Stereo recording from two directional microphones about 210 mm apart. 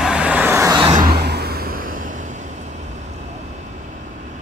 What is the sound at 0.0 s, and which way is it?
Vehicle, 5° right (ahead or behind).